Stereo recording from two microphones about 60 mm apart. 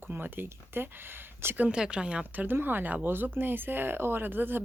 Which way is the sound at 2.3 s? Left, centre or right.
Right.